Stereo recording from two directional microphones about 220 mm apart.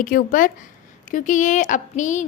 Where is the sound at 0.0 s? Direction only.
40° left (ahead or behind).